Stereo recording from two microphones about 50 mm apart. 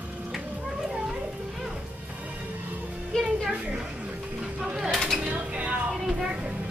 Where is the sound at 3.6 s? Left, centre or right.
Right.